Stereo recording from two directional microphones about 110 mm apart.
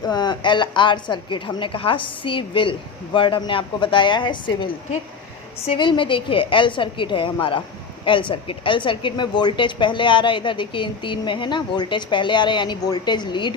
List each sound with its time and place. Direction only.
0.0 s a woman's voice: 40° left (ahead or behind)